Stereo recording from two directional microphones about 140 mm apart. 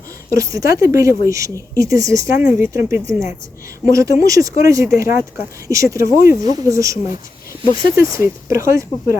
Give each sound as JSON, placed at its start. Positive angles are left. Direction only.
{"t": 0.3, "sound": "speech", "side_deg": -20}